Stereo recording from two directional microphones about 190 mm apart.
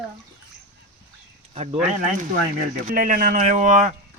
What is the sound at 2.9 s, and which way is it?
Speech, 50° right (ahead or behind).